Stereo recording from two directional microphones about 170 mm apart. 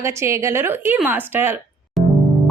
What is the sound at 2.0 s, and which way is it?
Music, centre (ahead or behind).